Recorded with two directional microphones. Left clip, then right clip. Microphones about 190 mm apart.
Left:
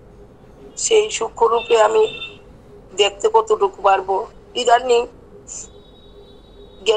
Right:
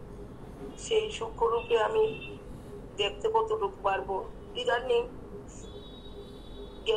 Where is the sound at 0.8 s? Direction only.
80° left.